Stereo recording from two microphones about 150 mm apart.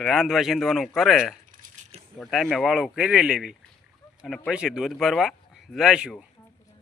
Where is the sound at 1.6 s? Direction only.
60° right (ahead or behind).